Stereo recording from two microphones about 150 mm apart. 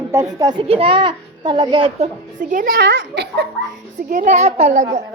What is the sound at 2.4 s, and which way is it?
A child's voice, 60° right (ahead or behind).